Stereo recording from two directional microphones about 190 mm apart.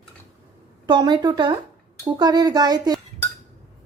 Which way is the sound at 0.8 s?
25° right (ahead or behind).